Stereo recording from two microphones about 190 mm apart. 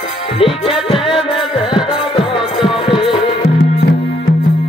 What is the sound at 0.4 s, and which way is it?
Music, 30° left (ahead or behind).